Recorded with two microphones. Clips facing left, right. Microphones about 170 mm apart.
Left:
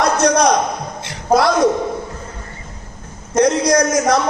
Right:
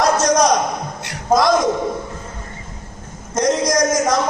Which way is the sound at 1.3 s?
65° left (ahead or behind).